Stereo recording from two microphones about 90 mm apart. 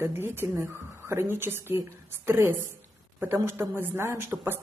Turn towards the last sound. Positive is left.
turn(degrees=-35)  # may be behind; listen again after turning